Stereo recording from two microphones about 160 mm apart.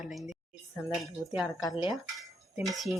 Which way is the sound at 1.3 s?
Centre (ahead or behind).